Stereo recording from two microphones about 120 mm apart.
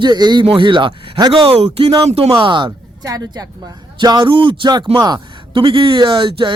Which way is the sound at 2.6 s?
30° right (ahead or behind).